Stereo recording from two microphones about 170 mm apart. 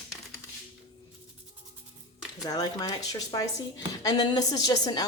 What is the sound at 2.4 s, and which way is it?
A woman's voice, 20° left (ahead or behind).